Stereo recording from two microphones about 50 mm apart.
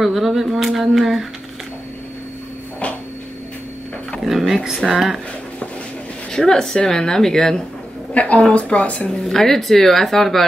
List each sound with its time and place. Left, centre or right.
0.0 s speech: centre
4.2 s speech: centre
6.3 s speech: centre
8.1 s a woman's voice: left
9.3 s speech: centre